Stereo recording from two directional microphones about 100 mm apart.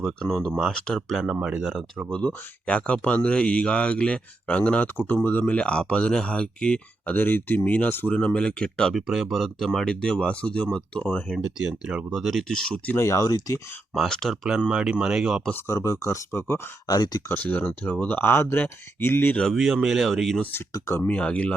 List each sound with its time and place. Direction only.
0.0 s speech: 5° left (ahead or behind)
1.1 s speech: 5° right (ahead or behind)
2.1 s speech: 10° left (ahead or behind)
11.3 s speech: 5° right (ahead or behind)
13.0 s speech: 30° left (ahead or behind)
13.9 s speech: 5° left (ahead or behind)
14.7 s speech: 10° right (ahead or behind)
15.6 s speech: 30° left (ahead or behind)
17.2 s speech: 15° left (ahead or behind)
19.4 s speech: centre (ahead or behind)
20.7 s speech: 30° left (ahead or behind)
21.1 s speech: 10° left (ahead or behind)